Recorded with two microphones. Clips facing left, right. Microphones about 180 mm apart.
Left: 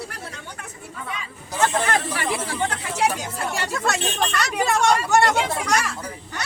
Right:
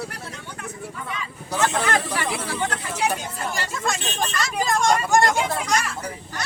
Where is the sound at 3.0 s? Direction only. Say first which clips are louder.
Left 2 dB; 80° left.